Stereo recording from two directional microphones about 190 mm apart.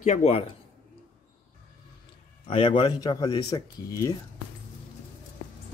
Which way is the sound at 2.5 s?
30° left (ahead or behind).